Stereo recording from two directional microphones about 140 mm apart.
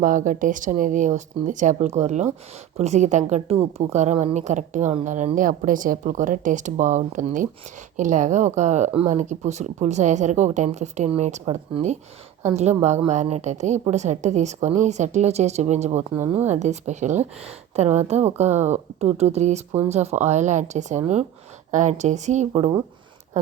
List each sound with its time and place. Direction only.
0.0 s a woman's voice: 70° right (ahead or behind)